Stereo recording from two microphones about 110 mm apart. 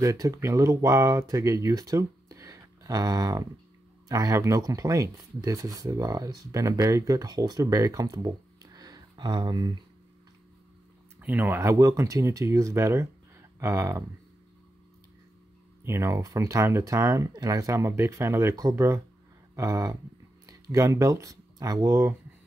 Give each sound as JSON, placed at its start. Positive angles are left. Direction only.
{"t": 0.0, "sound": "speech", "side_deg": -30}
{"t": 11.1, "sound": "speech", "side_deg": -15}
{"t": 15.8, "sound": "speech", "side_deg": -25}